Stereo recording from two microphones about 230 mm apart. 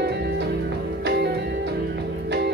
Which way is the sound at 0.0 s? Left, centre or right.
Right.